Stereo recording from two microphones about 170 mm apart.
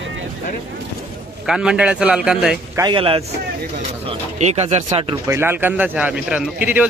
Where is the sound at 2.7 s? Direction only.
25° right (ahead or behind).